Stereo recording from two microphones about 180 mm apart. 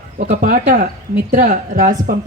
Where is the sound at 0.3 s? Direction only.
45° right (ahead or behind).